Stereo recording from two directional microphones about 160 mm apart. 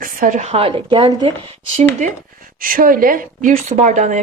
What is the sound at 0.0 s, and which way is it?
A woman's voice, 55° right (ahead or behind).